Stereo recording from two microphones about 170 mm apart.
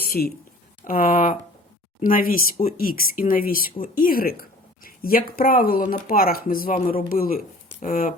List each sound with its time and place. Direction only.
0.0 s speech: 65° left (ahead or behind)